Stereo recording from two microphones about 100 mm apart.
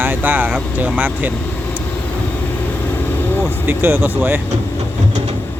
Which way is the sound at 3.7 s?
20° right (ahead or behind).